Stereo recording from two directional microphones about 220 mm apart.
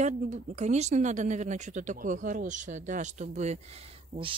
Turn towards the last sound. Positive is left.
turn(degrees=-25)  # may be behind; listen again after turning